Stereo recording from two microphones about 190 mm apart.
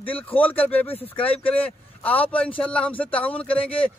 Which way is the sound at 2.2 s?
5° left (ahead or behind).